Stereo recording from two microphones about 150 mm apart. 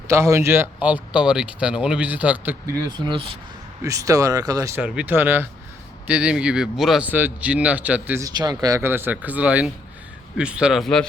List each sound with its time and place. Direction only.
0.1 s speech: 20° right (ahead or behind)
2.9 s speech: 30° right (ahead or behind)
3.8 s speech: 20° right (ahead or behind)
4.8 s speech: 5° right (ahead or behind)
8.2 s speech: 25° right (ahead or behind); by 11.0 s centre (ahead or behind)